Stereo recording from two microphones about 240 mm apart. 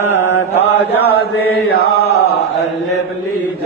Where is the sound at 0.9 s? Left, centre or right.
Left.